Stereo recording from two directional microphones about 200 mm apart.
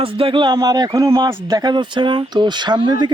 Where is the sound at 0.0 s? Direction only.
25° right (ahead or behind).